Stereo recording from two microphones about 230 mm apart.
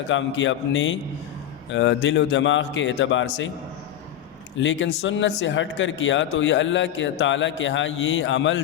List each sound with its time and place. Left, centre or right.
0.1 s a man's voice: left
4.5 s a man's voice: left